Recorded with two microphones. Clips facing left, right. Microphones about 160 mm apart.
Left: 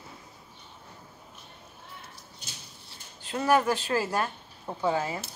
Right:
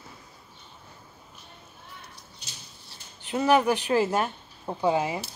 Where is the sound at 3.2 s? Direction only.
20° right (ahead or behind).